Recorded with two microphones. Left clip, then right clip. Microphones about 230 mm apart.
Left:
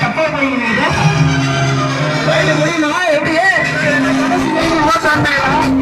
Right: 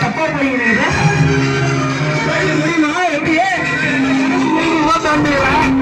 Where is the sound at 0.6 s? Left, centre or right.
Left.